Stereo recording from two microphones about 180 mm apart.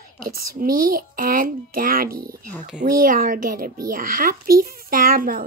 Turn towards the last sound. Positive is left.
turn(degrees=-50)  # may be behind; listen again after turning